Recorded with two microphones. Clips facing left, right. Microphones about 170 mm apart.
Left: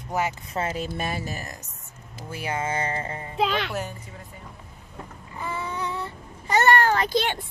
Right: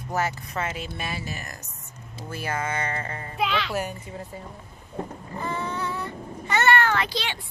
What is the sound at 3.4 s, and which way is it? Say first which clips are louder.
Speech: even; 50° left (ahead or behind).